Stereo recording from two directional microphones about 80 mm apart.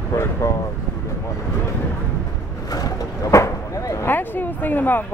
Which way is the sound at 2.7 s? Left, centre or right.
Left.